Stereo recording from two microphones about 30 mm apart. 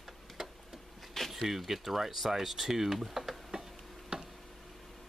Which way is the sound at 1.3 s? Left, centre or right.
Centre.